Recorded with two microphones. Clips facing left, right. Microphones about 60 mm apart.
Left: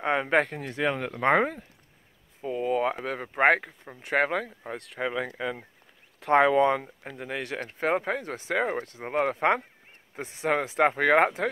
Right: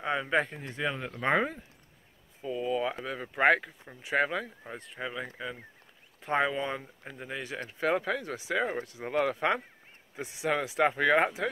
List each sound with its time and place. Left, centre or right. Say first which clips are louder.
0.0 s speech: left 4 dB; left
1.1 s speech: left 4 dB; left
4.8 s speech: left 7 dB; left
7.6 s speech: left 1 dB; left